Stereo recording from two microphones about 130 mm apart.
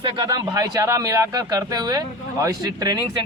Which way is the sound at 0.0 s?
30° right (ahead or behind).